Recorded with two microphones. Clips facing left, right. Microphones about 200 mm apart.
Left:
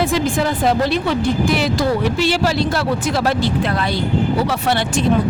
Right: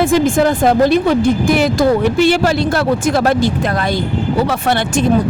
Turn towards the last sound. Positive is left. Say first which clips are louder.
# right 3 dB
turn(degrees=-50)  # may be behind; listen again after turning